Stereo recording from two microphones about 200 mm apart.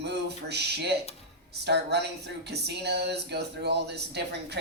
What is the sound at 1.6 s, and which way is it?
Speech, 55° right (ahead or behind).